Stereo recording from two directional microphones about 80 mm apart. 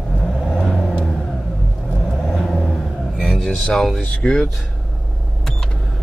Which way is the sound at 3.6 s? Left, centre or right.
Centre.